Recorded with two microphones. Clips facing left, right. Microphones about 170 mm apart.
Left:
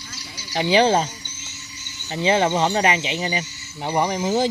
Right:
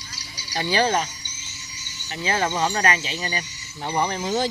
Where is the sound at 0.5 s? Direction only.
20° left (ahead or behind).